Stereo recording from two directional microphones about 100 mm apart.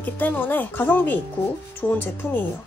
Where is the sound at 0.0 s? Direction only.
20° left (ahead or behind).